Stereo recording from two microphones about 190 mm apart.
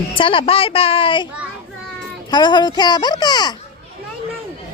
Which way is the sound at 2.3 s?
25° left (ahead or behind).